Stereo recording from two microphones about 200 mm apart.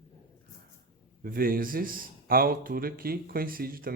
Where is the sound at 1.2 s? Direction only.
45° right (ahead or behind).